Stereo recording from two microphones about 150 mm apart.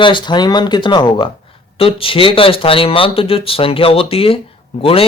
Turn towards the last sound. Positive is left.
turn(degrees=40)  # may be behind; listen again after turning